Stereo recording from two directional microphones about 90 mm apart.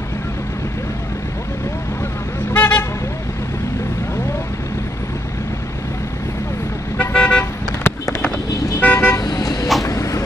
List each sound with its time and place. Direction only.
2.5 s vehicle: 20° left (ahead or behind)
7.0 s vehicle: 20° left (ahead or behind)
8.7 s car: 20° left (ahead or behind)
9.2 s toot: 45° left (ahead or behind)
9.8 s vehicle: 35° left (ahead or behind)